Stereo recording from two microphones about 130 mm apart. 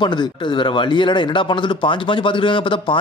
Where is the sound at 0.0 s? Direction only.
35° left (ahead or behind).